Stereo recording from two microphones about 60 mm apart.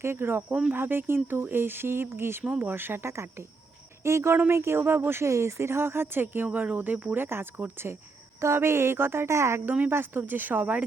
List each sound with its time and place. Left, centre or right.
0.0 s speech: right
0.4 s speech: centre
0.7 s a woman's voice: right
5.3 s speech: right
7.3 s a woman's voice: right
9.6 s speech: right